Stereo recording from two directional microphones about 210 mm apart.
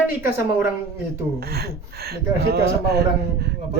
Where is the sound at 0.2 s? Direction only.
10° right (ahead or behind).